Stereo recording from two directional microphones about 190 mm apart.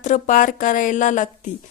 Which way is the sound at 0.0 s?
40° left (ahead or behind).